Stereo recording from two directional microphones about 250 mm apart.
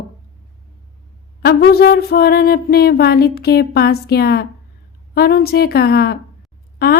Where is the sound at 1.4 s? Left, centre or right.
Left.